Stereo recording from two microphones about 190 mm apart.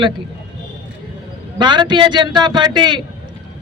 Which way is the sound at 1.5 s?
25° right (ahead or behind).